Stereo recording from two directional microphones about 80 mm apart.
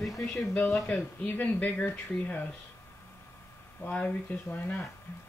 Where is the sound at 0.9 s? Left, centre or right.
Left.